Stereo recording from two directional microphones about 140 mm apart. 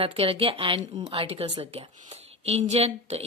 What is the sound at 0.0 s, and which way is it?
A woman's voice, 40° right (ahead or behind).